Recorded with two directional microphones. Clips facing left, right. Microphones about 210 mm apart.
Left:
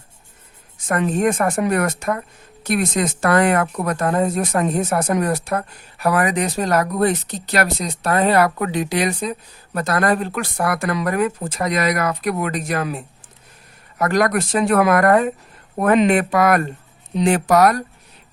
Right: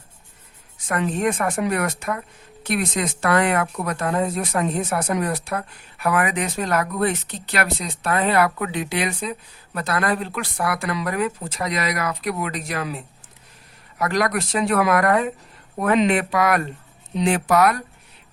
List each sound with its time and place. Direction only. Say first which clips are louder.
0.9 s speech: left 4 dB; 45° left (ahead or behind)
14.0 s speech: left 4 dB; 50° left (ahead or behind)